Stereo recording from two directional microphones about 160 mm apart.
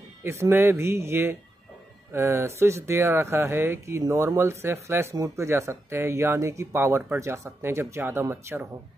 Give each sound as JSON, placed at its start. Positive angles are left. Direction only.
{"t": 0.2, "sound": "speech", "side_deg": -15}